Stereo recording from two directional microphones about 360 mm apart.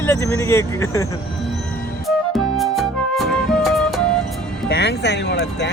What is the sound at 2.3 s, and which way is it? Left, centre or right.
Music, centre.